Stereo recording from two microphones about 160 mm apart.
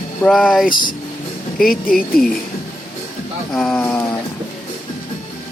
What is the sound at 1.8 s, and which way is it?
Speech, 65° left (ahead or behind).